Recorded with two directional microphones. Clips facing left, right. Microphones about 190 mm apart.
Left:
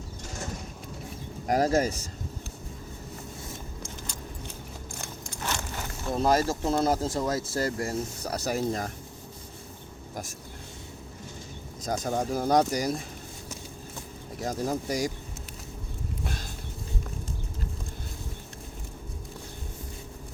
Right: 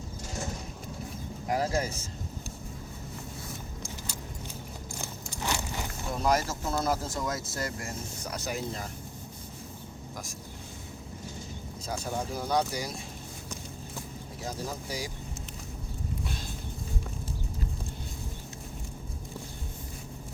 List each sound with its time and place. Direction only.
1.5 s speech: 45° left (ahead or behind)
3.8 s keys jangling: 5° right (ahead or behind)
5.4 s a sound: 10° right (ahead or behind)
6.1 s speech: 30° left (ahead or behind); by 8.9 s 45° left (ahead or behind)
11.9 s speech: 45° left (ahead or behind)
14.4 s speech: 45° left (ahead or behind)